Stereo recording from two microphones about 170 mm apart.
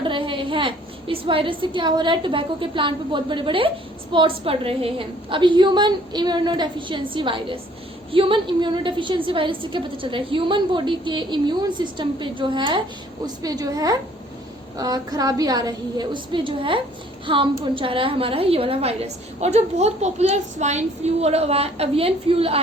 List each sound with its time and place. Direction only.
0.0 s a woman's voice: 30° right (ahead or behind)